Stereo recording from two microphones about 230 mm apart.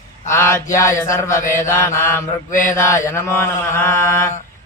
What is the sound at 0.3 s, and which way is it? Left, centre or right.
Mantra, centre.